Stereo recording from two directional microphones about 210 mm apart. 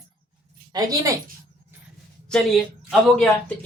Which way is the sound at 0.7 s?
15° right (ahead or behind).